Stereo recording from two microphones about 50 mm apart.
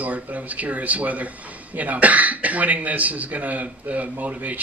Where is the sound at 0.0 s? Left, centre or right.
Right.